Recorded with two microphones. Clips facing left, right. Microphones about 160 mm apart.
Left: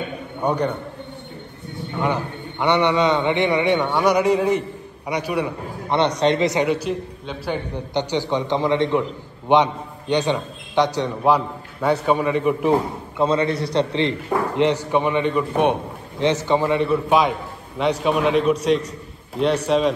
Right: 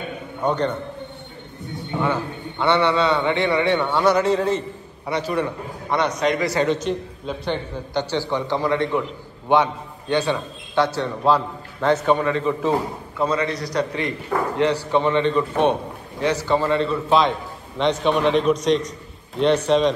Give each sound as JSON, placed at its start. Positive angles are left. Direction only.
{"t": 0.4, "sound": "a man's voice", "side_deg": 10}
{"t": 2.0, "sound": "a man's voice", "side_deg": 15}
{"t": 5.9, "sound": "a man's voice", "side_deg": 30}
{"t": 7.7, "sound": "a man's voice", "side_deg": 20}